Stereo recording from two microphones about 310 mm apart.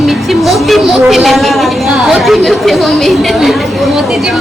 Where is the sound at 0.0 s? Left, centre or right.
Centre.